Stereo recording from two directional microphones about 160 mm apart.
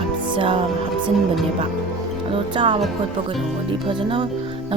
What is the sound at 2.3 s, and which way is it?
Speech, 35° right (ahead or behind).